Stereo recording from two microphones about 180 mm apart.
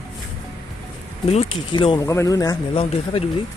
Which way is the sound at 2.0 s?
15° left (ahead or behind).